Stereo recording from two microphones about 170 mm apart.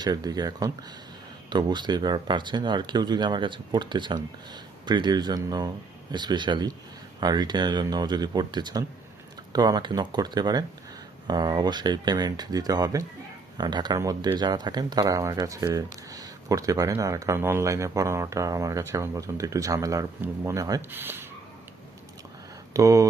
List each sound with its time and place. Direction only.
0.0 s speech: 25° right (ahead or behind)
22.7 s speech: 20° right (ahead or behind)